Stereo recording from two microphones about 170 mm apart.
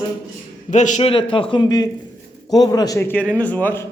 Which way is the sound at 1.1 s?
30° left (ahead or behind).